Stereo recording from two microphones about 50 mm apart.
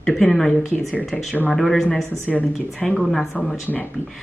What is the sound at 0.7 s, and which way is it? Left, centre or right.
Speech, left.